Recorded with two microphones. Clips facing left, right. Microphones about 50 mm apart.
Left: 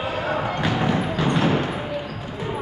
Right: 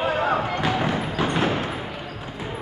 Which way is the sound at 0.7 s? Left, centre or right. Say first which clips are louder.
Left 1 dB; centre.